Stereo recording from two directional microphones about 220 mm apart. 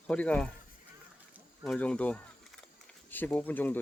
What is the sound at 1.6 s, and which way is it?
Speech, 5° left (ahead or behind).